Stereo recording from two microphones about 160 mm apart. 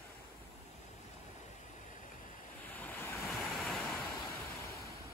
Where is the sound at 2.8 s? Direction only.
15° left (ahead or behind).